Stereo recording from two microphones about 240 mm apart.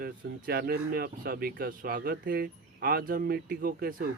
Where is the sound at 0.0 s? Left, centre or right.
Right.